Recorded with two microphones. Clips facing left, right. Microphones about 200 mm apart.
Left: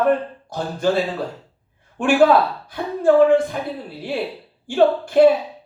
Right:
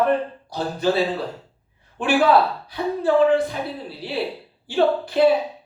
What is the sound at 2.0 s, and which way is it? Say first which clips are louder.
Speech: left 3 dB; 50° left (ahead or behind).